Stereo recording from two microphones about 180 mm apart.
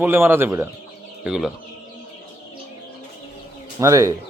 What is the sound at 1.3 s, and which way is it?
Speech, centre (ahead or behind).